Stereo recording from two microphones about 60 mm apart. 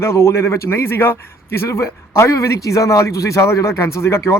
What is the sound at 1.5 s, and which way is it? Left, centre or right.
A man's voice, left.